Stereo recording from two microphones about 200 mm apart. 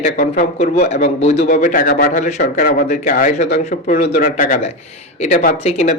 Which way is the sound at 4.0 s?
55° left (ahead or behind).